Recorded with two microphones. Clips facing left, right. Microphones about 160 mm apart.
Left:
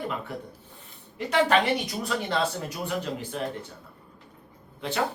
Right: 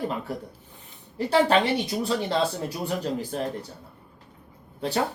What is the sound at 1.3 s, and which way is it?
A woman's voice, 30° right (ahead or behind).